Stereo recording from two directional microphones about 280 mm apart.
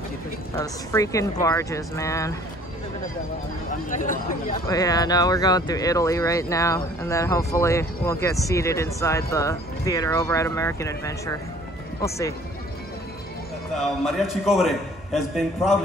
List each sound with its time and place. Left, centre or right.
0.6 s speech: centre
3.9 s speech: left
4.6 s speech: centre
14.0 s a man's voice: centre